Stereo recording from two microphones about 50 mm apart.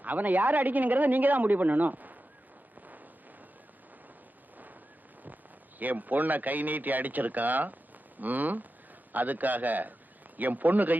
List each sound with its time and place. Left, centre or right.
0.0 s a woman's voice: right
5.8 s a woman's voice: right